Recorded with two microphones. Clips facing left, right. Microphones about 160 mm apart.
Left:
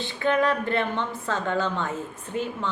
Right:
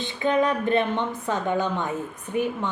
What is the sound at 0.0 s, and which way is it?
A woman's voice, 20° right (ahead or behind).